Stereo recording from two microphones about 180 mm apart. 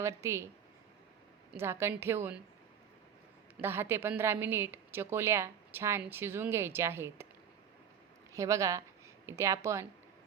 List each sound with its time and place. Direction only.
0.0 s a woman's voice: 15° right (ahead or behind)
1.5 s a woman's voice: 15° right (ahead or behind)
3.6 s a woman's voice: 10° right (ahead or behind)
8.3 s a woman's voice: 15° right (ahead or behind)